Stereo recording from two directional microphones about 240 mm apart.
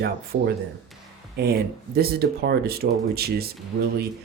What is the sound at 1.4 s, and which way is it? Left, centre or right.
Speech, right.